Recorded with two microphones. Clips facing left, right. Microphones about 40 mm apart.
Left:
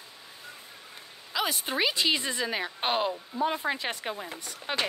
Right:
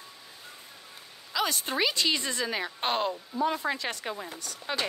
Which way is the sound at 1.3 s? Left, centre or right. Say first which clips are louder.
Even; centre.